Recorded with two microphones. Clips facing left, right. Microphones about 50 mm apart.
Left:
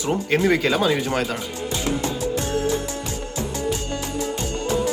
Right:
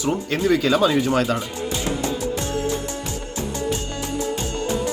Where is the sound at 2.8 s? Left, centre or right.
Right.